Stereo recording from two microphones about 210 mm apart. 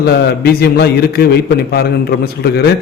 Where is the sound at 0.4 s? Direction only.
50° left (ahead or behind).